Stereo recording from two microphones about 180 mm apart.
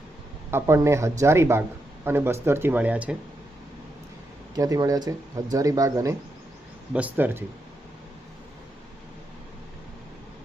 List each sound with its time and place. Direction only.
0.5 s speech: 15° right (ahead or behind)
4.5 s speech: 20° right (ahead or behind)